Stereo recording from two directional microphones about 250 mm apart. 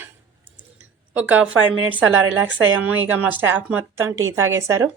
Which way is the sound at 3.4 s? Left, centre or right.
Centre.